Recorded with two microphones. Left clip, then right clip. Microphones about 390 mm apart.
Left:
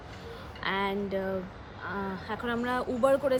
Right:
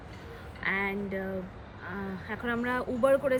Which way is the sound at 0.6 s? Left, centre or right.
Centre.